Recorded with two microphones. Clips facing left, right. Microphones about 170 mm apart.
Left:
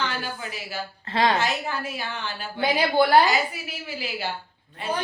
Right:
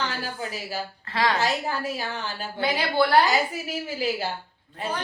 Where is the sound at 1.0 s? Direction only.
25° left (ahead or behind).